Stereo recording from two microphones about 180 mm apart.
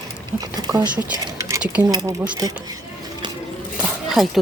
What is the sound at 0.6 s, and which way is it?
Speech, 20° right (ahead or behind).